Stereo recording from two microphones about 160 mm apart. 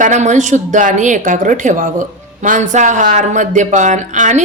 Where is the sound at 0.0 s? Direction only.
50° right (ahead or behind).